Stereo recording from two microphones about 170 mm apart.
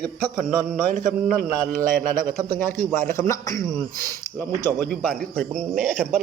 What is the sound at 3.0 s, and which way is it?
Speech, 15° left (ahead or behind).